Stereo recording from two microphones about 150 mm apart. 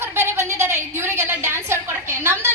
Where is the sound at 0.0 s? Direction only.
15° right (ahead or behind).